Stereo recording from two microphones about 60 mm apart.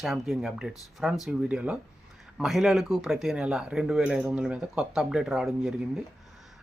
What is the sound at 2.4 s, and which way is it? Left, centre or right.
Speech, centre.